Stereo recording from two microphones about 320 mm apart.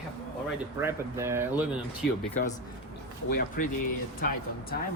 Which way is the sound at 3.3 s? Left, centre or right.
Left.